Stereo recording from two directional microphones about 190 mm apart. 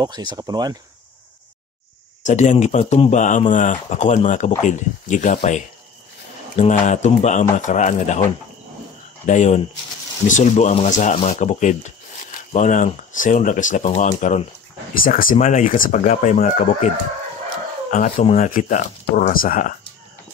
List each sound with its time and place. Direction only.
0.0 s speech: 20° right (ahead or behind)
2.2 s speech: 40° left (ahead or behind)
17.9 s speech: 50° left (ahead or behind)